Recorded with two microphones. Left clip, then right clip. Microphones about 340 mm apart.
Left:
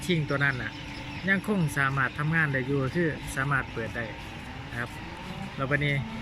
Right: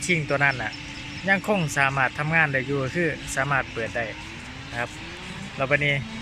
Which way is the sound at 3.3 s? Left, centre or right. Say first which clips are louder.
Right 5 dB; centre.